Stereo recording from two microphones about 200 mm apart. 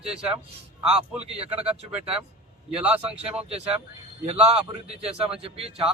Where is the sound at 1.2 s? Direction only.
30° right (ahead or behind).